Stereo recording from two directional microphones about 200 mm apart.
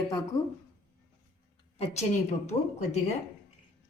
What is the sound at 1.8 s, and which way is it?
A woman's voice, 35° left (ahead or behind).